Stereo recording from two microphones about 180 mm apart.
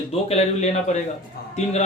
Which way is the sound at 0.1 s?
35° left (ahead or behind).